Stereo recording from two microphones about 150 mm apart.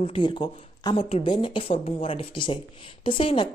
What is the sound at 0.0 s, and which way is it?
A woman's voice, 35° left (ahead or behind).